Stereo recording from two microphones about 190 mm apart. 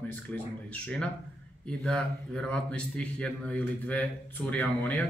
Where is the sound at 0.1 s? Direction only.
5° left (ahead or behind).